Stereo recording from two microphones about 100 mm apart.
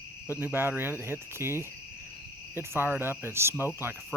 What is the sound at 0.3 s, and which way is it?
Cricket, 25° right (ahead or behind).